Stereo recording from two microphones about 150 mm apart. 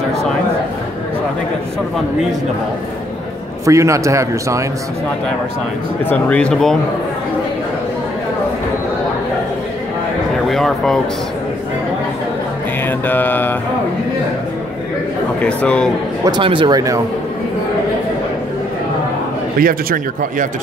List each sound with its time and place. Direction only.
3.6 s a man's voice: 20° right (ahead or behind)
6.0 s mantra: 10° left (ahead or behind)
10.5 s speech: centre (ahead or behind)
12.8 s mantra: 15° left (ahead or behind)
15.4 s mantra: 5° left (ahead or behind)
16.3 s a man's voice: 35° right (ahead or behind)
19.6 s speech: 75° right (ahead or behind)